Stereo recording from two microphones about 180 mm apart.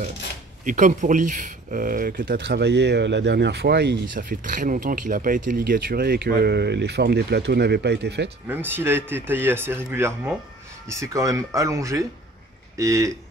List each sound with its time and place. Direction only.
0.7 s speech: 45° right (ahead or behind)
2.3 s speech: 75° right (ahead or behind)
4.2 s speech: 50° right (ahead or behind); by 8.3 s 70° right (ahead or behind)
8.5 s speech: 10° right (ahead or behind)